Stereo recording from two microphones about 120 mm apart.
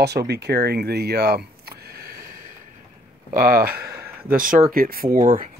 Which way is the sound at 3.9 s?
20° right (ahead or behind).